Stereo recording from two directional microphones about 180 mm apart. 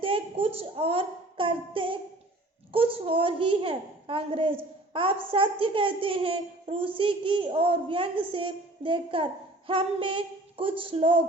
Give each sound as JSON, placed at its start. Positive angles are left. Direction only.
{"t": 0.0, "sound": "a woman's voice", "side_deg": -30}